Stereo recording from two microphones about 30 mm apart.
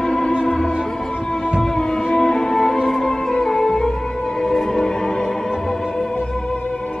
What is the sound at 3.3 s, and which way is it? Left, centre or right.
Music, left.